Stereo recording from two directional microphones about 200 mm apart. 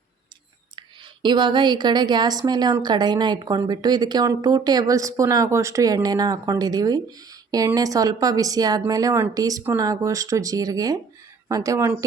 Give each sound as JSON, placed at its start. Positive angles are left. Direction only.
{"t": 0.8, "sound": "a woman's voice", "side_deg": -20}